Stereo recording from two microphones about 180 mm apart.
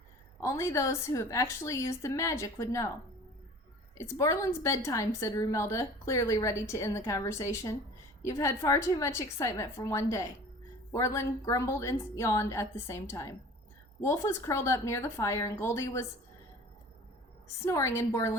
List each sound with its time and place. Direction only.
0.3 s a woman's voice: 15° left (ahead or behind)
3.9 s a woman's voice: 15° left (ahead or behind)
17.7 s a woman's voice: 15° left (ahead or behind)